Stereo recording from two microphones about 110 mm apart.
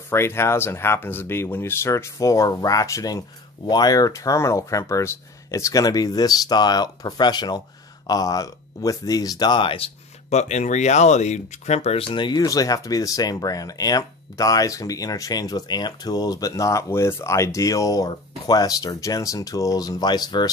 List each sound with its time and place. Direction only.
0.1 s speech: 25° left (ahead or behind); by 9.8 s 50° left (ahead or behind)
10.3 s speech: 90° left; by 12.1 s 70° left (ahead or behind)
12.1 s speech: 45° left (ahead or behind)